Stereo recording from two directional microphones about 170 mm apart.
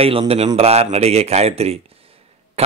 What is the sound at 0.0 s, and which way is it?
A man's voice, 35° right (ahead or behind).